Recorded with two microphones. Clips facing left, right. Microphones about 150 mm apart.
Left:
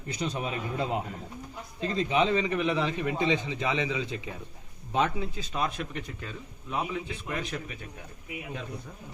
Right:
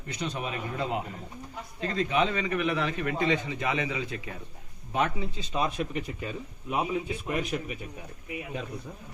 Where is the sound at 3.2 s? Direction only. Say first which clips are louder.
Right 1 dB; 20° left (ahead or behind).